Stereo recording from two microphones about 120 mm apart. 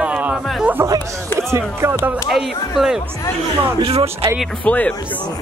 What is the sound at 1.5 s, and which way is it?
Speech, 20° right (ahead or behind).